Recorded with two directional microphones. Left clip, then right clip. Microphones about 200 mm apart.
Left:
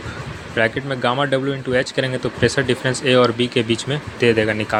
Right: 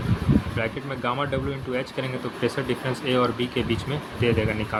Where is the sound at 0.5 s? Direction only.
25° left (ahead or behind).